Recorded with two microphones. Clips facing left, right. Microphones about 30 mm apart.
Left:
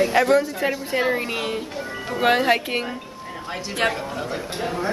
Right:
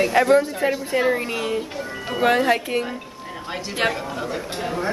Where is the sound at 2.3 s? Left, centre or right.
Left.